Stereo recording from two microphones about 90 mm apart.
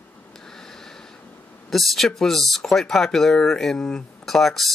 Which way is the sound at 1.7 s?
Centre (ahead or behind).